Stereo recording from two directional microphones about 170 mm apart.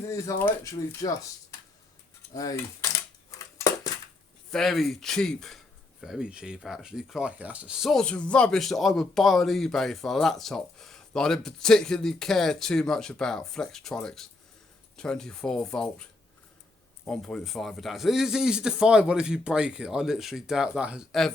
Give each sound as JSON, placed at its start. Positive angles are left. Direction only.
{"t": 0.1, "sound": "speech", "side_deg": 15}
{"t": 4.5, "sound": "speech", "side_deg": 0}
{"t": 17.1, "sound": "speech", "side_deg": 5}